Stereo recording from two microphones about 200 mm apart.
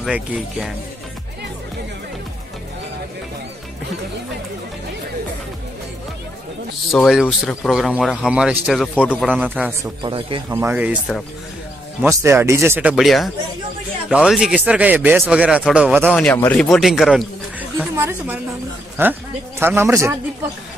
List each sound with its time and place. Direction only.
0.0 s speech: centre (ahead or behind)
6.9 s speech: centre (ahead or behind)
9.3 s speech: 10° right (ahead or behind)
10.0 s a man's voice: 25° right (ahead or behind)
10.5 s speech: 10° right (ahead or behind)
12.0 s speech: 15° right (ahead or behind)
16.1 s speech: 5° left (ahead or behind); by 20.2 s 15° right (ahead or behind)